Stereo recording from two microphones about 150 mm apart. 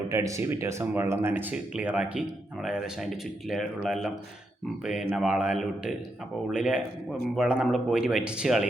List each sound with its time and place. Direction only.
0.1 s speech: 20° right (ahead or behind); by 8.6 s 5° right (ahead or behind)